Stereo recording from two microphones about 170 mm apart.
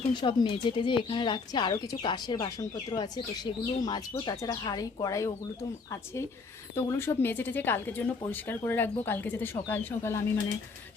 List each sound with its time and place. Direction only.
0.1 s speech: 25° left (ahead or behind)
6.7 s speech: 15° left (ahead or behind)